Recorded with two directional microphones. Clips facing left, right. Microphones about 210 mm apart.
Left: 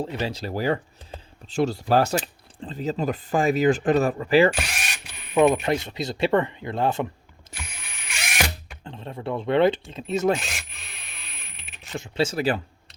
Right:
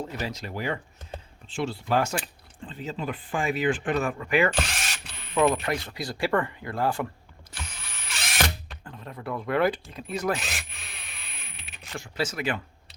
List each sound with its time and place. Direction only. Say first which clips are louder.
0.0 s speech: left 5 dB; 30° left (ahead or behind)
5.3 s speech: left 5 dB; 15° left (ahead or behind)
7.5 s a sound: left 1 dB; 25° left (ahead or behind)
8.0 s drill: left 1 dB; 10° left (ahead or behind)
8.8 s speech: left 6 dB; 25° left (ahead or behind)
10.3 s a sound: left 3 dB; centre (ahead or behind)
11.9 s speech: left 6 dB; 25° left (ahead or behind)